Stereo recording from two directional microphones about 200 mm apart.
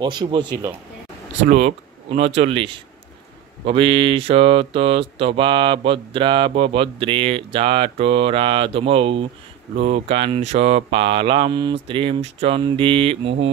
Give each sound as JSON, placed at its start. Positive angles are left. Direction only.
{"t": 0.0, "sound": "speech", "side_deg": -20}
{"t": 1.4, "sound": "speech", "side_deg": -40}